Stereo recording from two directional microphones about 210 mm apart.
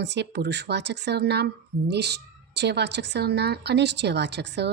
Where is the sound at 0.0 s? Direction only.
55° right (ahead or behind).